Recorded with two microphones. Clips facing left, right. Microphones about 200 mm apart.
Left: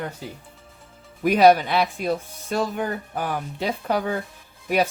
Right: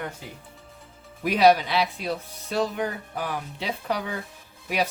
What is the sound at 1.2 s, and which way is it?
Speech, 45° left (ahead or behind).